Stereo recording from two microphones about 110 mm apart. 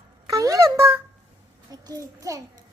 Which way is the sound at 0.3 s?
30° right (ahead or behind).